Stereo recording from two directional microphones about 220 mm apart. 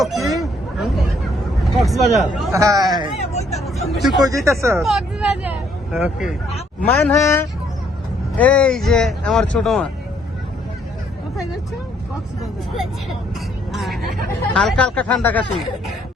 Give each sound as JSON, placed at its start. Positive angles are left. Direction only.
{"t": 0.1, "sound": "a sound", "side_deg": 0}
{"t": 1.7, "sound": "speech", "side_deg": 0}
{"t": 2.5, "sound": "speech", "side_deg": -15}
{"t": 3.2, "sound": "speech", "side_deg": 30}
{"t": 4.2, "sound": "speech", "side_deg": -15}
{"t": 4.8, "sound": "speech", "side_deg": 0}
{"t": 6.9, "sound": "speech", "side_deg": 10}
{"t": 12.7, "sound": "speech", "side_deg": 0}